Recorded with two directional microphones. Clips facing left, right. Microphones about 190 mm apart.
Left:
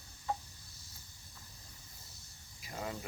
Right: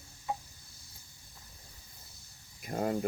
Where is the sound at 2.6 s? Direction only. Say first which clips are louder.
Right 9 dB; 50° right (ahead or behind).